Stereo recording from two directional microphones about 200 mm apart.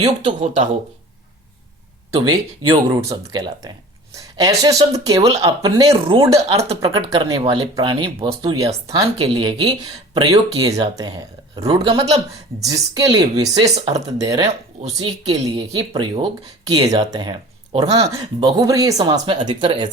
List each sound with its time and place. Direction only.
0.3 s speech: 40° right (ahead or behind)
2.2 s speech: 20° right (ahead or behind)
12.6 s speech: 15° right (ahead or behind)